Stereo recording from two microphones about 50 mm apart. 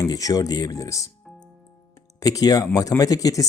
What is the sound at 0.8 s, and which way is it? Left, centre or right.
Speech, left.